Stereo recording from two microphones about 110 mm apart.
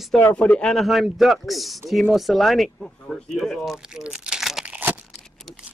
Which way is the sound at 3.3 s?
Centre (ahead or behind).